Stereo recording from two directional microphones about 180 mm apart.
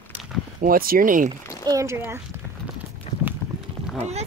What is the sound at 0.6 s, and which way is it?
Speech, 55° right (ahead or behind).